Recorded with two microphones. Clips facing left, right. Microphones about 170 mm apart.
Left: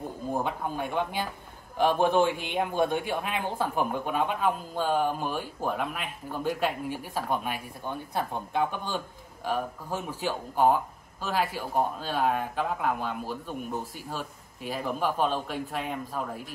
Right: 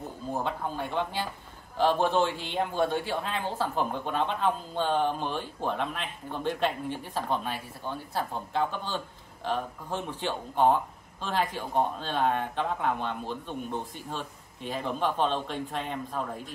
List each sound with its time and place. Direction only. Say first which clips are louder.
0.3 s a man's voice: left 1 dB; 10° left (ahead or behind)